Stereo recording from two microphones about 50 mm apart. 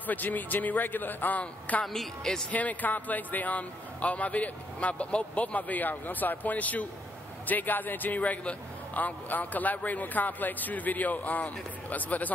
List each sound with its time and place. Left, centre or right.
0.0 s a man's voice: left
1.9 s a woman's voice: centre
2.5 s a man's voice: left